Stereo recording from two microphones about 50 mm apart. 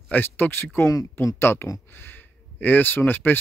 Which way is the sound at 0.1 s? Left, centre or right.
Left.